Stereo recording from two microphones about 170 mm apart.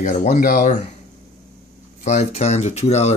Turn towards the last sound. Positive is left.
turn(degrees=40)  # may be behind; listen again after turning